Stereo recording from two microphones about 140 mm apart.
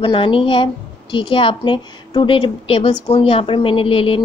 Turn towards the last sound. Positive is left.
turn(degrees=40)  # may be behind; listen again after turning